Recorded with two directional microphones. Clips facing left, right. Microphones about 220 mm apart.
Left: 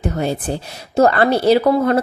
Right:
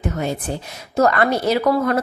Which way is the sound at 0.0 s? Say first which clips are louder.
Left 3 dB; 30° left (ahead or behind).